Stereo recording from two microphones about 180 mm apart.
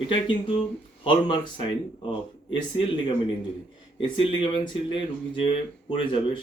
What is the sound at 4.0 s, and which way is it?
Speech, 30° left (ahead or behind).